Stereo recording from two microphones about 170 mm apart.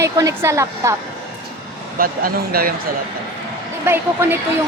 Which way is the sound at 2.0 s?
60° right (ahead or behind).